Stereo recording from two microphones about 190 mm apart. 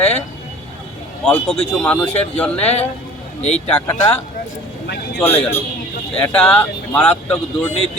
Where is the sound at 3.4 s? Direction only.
35° left (ahead or behind).